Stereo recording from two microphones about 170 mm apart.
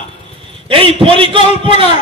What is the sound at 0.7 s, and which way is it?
Speech, 30° right (ahead or behind).